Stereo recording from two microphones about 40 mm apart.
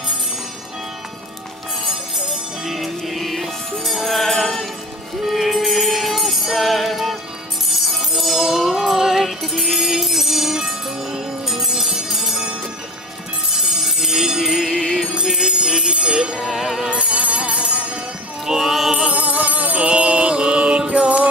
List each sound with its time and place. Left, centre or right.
1.9 s music: centre
13.6 s music: centre
14.7 s music: centre
15.1 s music: centre
16.3 s music: centre
16.9 s music: right
18.4 s music: centre
19.4 s music: right
19.8 s music: right